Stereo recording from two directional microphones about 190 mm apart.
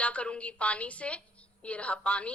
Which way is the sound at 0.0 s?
5° left (ahead or behind).